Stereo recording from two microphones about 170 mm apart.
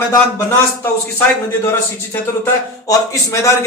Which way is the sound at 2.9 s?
20° left (ahead or behind).